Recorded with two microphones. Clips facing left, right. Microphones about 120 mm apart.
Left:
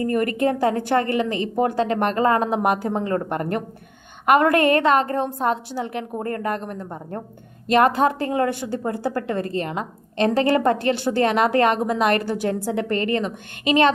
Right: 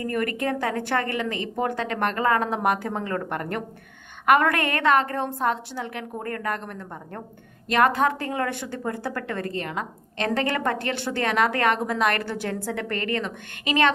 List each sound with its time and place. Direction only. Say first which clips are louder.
0.0 s a woman's voice: left 6 dB; 25° left (ahead or behind)